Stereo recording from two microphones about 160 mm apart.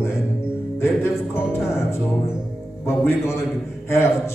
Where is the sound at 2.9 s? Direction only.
15° left (ahead or behind).